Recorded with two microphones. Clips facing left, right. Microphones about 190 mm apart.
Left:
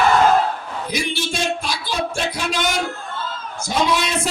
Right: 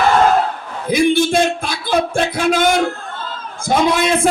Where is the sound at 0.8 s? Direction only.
55° right (ahead or behind).